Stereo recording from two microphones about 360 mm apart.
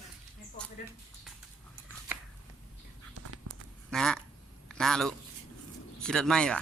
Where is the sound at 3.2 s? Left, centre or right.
Right.